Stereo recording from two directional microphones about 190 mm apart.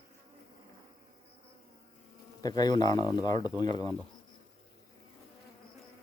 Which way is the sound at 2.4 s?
20° left (ahead or behind).